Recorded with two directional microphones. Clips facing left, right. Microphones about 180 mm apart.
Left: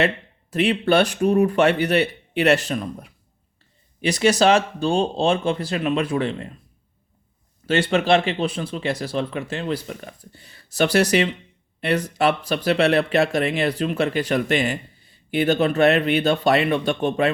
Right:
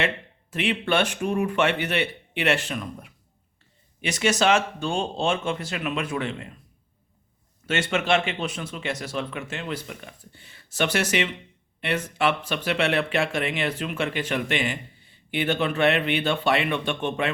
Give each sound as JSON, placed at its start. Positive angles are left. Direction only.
{"t": 0.5, "sound": "speech", "side_deg": 40}
{"t": 7.7, "sound": "speech", "side_deg": 35}